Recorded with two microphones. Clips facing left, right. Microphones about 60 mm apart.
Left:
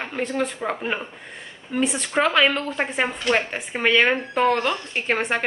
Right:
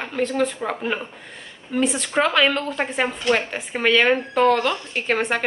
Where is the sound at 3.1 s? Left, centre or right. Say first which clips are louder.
Right 1 dB; centre.